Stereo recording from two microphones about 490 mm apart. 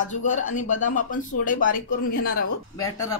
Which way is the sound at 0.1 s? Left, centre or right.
Centre.